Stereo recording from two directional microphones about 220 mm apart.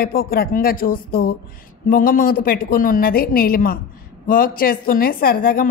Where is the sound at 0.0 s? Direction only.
40° left (ahead or behind).